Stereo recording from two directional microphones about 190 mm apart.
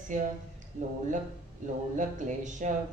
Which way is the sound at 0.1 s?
40° right (ahead or behind).